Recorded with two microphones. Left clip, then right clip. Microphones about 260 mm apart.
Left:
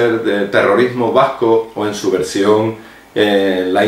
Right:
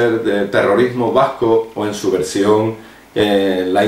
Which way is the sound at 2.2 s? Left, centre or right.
Centre.